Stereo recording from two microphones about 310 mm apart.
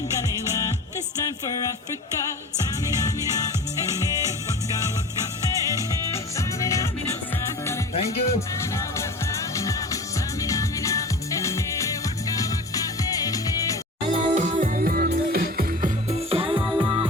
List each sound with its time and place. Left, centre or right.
5.7 s music: centre
14.1 s music: right